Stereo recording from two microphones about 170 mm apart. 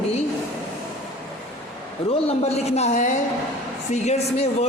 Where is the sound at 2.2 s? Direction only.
40° left (ahead or behind).